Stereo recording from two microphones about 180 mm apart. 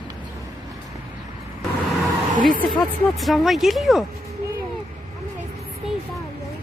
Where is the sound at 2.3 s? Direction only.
50° right (ahead or behind).